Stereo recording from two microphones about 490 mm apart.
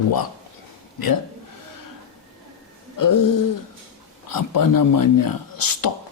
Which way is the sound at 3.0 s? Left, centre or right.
Left.